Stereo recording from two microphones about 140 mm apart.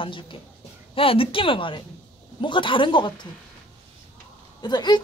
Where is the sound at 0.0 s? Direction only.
35° left (ahead or behind).